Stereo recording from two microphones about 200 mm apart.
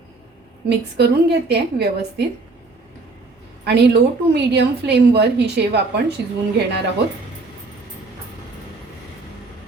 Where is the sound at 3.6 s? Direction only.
55° right (ahead or behind).